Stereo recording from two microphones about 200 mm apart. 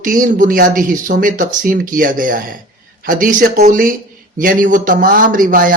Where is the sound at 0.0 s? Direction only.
45° right (ahead or behind).